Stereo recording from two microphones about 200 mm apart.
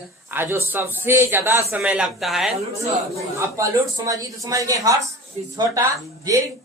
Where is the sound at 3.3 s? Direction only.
15° right (ahead or behind).